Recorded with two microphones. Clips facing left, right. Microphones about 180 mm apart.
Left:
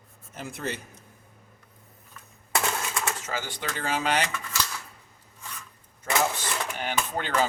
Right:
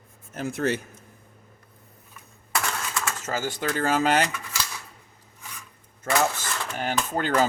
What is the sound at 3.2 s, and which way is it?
Speech, 45° right (ahead or behind).